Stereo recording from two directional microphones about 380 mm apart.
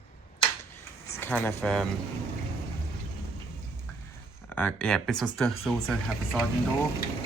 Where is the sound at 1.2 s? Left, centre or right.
Centre.